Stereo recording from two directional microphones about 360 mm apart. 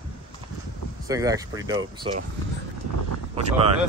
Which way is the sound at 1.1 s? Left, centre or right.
Centre.